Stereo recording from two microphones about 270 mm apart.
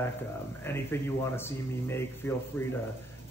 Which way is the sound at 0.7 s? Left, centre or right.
Centre.